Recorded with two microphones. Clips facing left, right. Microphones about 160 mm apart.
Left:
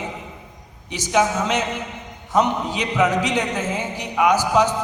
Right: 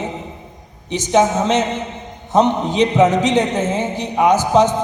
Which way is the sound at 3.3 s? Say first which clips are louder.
Right 6 dB; 25° right (ahead or behind).